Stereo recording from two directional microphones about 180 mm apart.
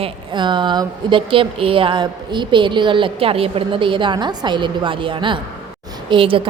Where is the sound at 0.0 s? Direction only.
25° right (ahead or behind).